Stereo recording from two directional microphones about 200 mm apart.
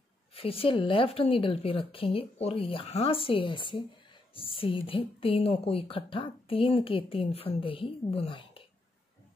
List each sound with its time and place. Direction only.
0.3 s a woman's voice: 30° left (ahead or behind)